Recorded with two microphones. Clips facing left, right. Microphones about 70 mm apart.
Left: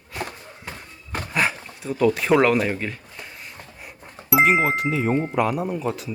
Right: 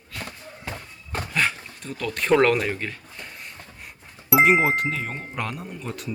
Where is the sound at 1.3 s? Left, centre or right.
Centre.